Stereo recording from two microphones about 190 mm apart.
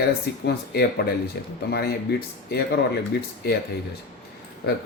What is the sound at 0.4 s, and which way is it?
Speech, 60° left (ahead or behind).